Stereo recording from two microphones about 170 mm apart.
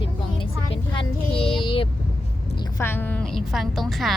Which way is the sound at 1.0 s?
30° left (ahead or behind).